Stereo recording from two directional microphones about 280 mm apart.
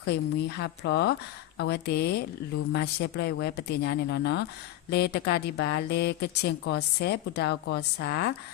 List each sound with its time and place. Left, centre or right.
0.0 s speech: left